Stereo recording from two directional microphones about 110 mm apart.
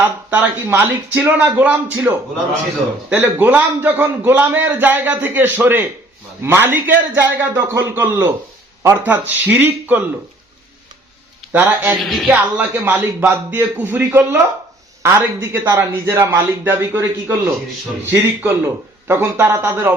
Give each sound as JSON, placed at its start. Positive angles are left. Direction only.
{"t": 0.0, "sound": "a man's voice", "side_deg": -15}
{"t": 3.1, "sound": "a man's voice", "side_deg": -15}
{"t": 11.5, "sound": "a man's voice", "side_deg": -15}
{"t": 11.9, "sound": "music", "side_deg": 0}
{"t": 12.3, "sound": "a man's voice", "side_deg": -15}